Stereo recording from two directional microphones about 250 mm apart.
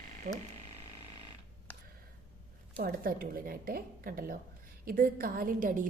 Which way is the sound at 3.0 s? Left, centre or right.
Right.